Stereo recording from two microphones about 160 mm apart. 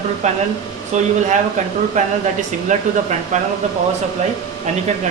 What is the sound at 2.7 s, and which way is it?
Speech, 50° right (ahead or behind).